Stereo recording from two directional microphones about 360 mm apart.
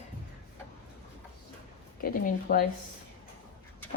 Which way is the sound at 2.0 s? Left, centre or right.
Left.